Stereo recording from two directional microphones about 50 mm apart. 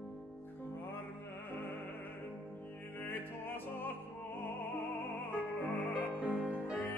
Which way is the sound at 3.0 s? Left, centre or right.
Left.